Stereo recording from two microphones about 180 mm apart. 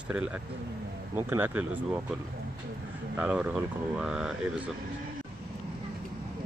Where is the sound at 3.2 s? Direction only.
5° right (ahead or behind).